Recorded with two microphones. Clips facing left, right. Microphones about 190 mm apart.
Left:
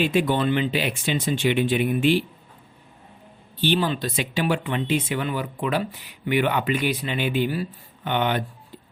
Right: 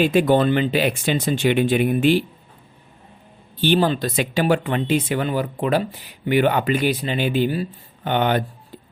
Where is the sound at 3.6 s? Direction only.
45° right (ahead or behind); by 7.7 s 30° right (ahead or behind).